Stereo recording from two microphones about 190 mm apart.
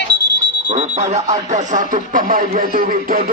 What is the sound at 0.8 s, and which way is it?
Speech, 35° right (ahead or behind).